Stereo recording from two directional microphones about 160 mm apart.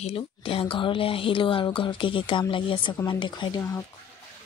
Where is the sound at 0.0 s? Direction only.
35° left (ahead or behind).